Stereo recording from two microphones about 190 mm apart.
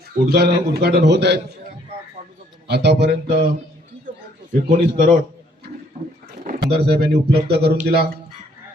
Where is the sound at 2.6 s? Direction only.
60° right (ahead or behind).